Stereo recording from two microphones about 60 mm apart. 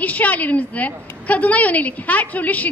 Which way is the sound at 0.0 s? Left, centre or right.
Left.